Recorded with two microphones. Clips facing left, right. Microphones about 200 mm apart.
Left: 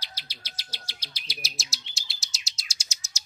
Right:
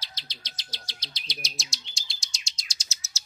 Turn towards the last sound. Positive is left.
turn(degrees=15)  # may be behind; listen again after turning